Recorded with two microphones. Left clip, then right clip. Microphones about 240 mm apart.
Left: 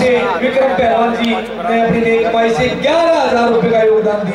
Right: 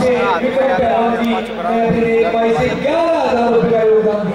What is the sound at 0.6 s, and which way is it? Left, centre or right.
A man's voice, centre.